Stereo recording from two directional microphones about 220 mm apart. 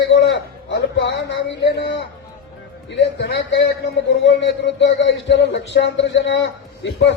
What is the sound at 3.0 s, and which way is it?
A man's voice, 50° left (ahead or behind).